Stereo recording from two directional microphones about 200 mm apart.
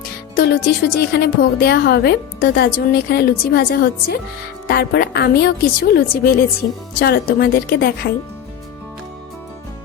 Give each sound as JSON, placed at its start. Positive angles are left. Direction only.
{"t": 0.3, "sound": "a woman's voice", "side_deg": 50}